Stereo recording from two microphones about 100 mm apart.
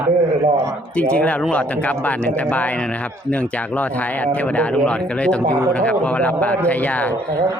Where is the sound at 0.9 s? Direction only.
15° left (ahead or behind).